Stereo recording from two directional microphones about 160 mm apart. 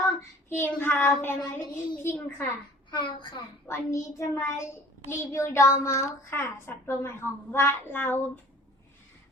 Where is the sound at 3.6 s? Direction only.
15° left (ahead or behind).